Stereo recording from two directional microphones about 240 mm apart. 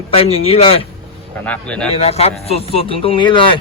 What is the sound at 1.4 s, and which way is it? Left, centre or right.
Speech, centre.